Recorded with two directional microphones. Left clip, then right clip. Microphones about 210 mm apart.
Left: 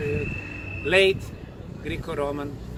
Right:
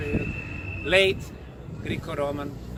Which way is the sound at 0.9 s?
10° right (ahead or behind).